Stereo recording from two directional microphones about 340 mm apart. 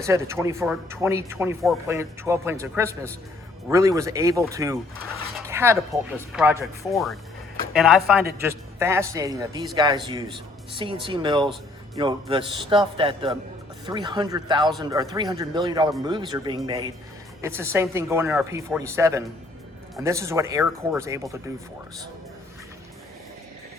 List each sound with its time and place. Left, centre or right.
0.0 s speech: centre